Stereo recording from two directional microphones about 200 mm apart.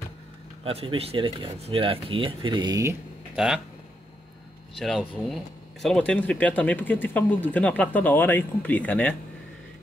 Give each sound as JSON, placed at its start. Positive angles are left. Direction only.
{"t": 0.7, "sound": "speech", "side_deg": -30}
{"t": 3.3, "sound": "speech", "side_deg": 0}
{"t": 4.7, "sound": "speech", "side_deg": 0}